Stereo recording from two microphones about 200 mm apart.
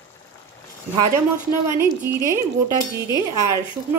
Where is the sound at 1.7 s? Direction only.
10° right (ahead or behind).